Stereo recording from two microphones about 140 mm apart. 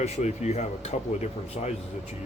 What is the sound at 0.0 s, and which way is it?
Speech, 55° left (ahead or behind).